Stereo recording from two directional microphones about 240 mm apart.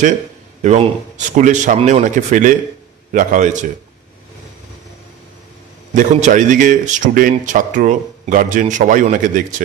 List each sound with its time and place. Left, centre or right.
0.6 s a man's voice: right
5.9 s a man's voice: right